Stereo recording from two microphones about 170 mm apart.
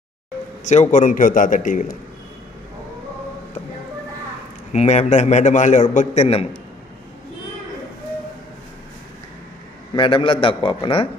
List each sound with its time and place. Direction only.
0.7 s a man's voice: 45° left (ahead or behind)
4.7 s a man's voice: 40° left (ahead or behind)
9.9 s a man's voice: 30° left (ahead or behind)